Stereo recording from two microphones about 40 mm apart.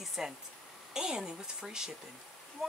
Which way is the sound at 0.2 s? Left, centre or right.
Centre.